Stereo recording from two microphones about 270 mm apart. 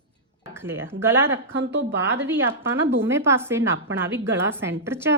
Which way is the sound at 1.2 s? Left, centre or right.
Right.